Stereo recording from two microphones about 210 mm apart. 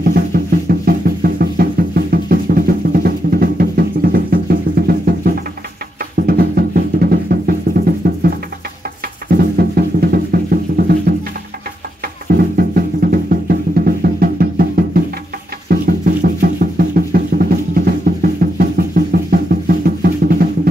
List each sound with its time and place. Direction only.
0.0 s music: 45° right (ahead or behind)
12.3 s music: 45° right (ahead or behind)